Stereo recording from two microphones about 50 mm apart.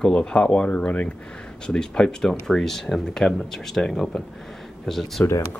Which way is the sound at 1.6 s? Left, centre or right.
Centre.